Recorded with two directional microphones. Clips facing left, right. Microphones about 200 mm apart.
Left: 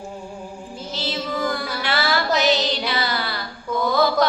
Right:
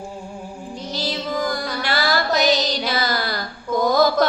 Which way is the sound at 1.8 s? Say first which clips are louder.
Right 1 dB; 40° right (ahead or behind).